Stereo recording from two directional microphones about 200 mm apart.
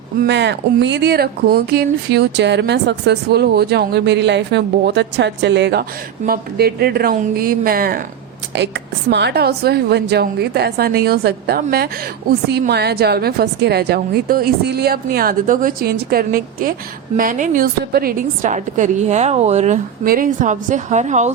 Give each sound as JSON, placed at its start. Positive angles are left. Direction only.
{"t": 0.3, "sound": "speech", "side_deg": -60}
{"t": 6.2, "sound": "a woman's voice", "side_deg": -50}
{"t": 8.5, "sound": "a woman's voice", "side_deg": -60}